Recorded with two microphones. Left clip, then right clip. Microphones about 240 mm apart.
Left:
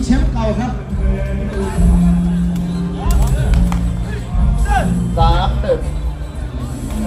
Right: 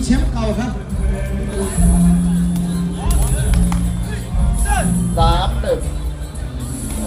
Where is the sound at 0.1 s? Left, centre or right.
Centre.